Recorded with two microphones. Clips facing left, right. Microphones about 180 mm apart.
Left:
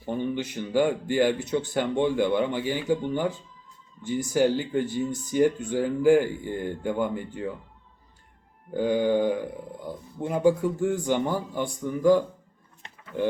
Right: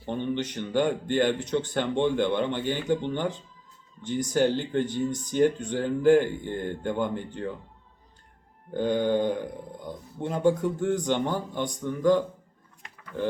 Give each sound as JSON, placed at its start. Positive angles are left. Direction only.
{"t": 0.0, "sound": "speech", "side_deg": 10}
{"t": 8.7, "sound": "speech", "side_deg": 5}
{"t": 12.8, "sound": "a sound", "side_deg": 25}